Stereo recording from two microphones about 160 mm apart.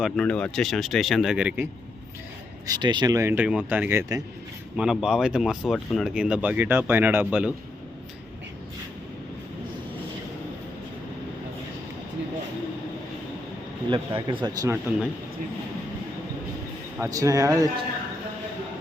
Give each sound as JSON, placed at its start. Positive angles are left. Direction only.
{"t": 0.0, "sound": "speech", "side_deg": 5}
{"t": 2.6, "sound": "speech", "side_deg": -25}
{"t": 4.8, "sound": "speech", "side_deg": -5}
{"t": 13.9, "sound": "a man's voice", "side_deg": -30}
{"t": 14.6, "sound": "speech", "side_deg": -15}
{"t": 17.0, "sound": "speech", "side_deg": -20}